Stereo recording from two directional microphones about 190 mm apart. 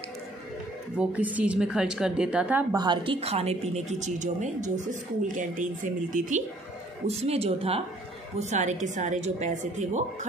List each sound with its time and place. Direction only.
0.9 s a woman's voice: 10° right (ahead or behind)
2.7 s a woman's voice: 20° right (ahead or behind); by 10.0 s 40° right (ahead or behind)